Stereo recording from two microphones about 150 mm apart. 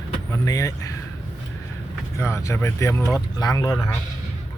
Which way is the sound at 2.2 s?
20° left (ahead or behind).